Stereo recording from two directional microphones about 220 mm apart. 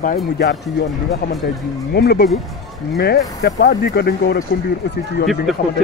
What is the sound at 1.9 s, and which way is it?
Speech, 50° left (ahead or behind).